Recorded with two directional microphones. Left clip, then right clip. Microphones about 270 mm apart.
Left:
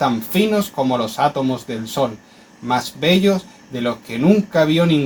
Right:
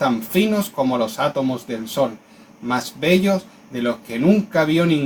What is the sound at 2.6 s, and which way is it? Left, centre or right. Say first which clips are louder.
Speech: left 2 dB; left.